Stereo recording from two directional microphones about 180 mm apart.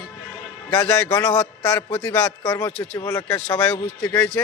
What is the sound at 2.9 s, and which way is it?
Speech, 20° left (ahead or behind).